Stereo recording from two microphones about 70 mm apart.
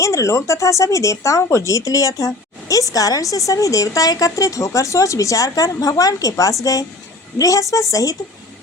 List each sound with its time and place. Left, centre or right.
0.0 s speech: left